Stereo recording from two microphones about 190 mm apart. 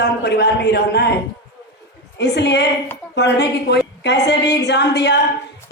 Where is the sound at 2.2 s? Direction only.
65° left (ahead or behind).